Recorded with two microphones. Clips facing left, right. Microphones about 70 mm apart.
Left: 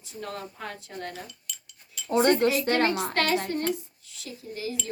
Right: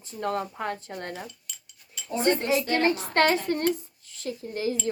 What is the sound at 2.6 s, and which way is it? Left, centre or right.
Speech, left.